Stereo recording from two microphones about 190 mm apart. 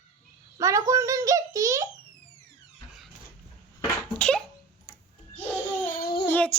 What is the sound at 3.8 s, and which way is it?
Cough, 5° left (ahead or behind).